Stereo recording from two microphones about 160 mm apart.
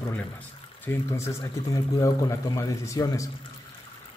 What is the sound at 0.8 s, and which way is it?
A man's voice, 15° left (ahead or behind).